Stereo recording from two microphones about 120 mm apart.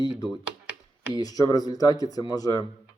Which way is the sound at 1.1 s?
30° left (ahead or behind).